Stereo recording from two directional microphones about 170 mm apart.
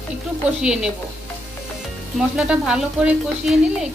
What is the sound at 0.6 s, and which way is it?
Speech, 5° right (ahead or behind).